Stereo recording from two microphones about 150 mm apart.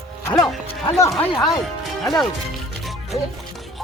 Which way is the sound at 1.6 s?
Centre (ahead or behind).